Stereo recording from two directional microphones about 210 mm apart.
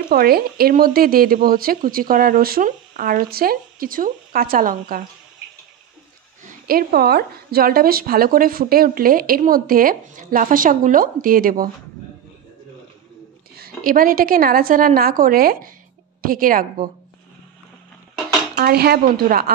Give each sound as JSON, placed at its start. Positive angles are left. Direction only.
{"t": 0.1, "sound": "a woman's voice", "side_deg": -45}
{"t": 6.4, "sound": "a woman's voice", "side_deg": -45}
{"t": 13.6, "sound": "a woman's voice", "side_deg": -45}
{"t": 18.6, "sound": "a woman's voice", "side_deg": -45}